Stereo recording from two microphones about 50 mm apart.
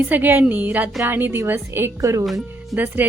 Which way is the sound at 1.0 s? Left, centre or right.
Right.